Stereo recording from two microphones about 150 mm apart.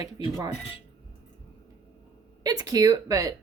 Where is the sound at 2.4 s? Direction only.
25° right (ahead or behind).